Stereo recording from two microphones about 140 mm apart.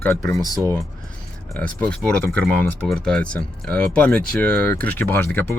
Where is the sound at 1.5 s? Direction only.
10° left (ahead or behind).